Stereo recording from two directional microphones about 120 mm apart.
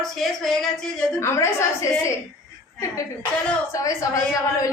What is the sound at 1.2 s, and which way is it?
Speech, 20° left (ahead or behind).